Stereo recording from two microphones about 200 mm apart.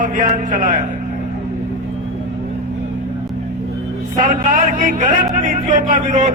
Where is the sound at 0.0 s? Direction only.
40° right (ahead or behind).